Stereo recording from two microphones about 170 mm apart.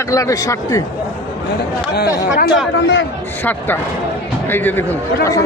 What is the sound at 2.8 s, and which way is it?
Speech, 90° left.